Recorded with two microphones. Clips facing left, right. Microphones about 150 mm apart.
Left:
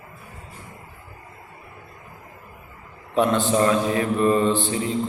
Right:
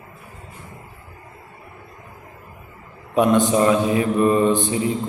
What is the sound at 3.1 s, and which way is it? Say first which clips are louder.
Mantra: right 3 dB; 15° right (ahead or behind).